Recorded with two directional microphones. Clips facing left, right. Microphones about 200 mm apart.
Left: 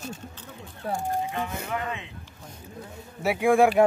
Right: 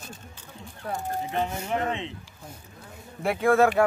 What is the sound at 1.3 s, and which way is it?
Speech, 30° right (ahead or behind).